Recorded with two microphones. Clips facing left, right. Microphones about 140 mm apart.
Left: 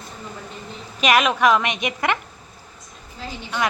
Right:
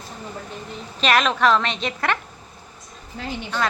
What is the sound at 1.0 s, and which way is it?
A woman's voice, 10° left (ahead or behind).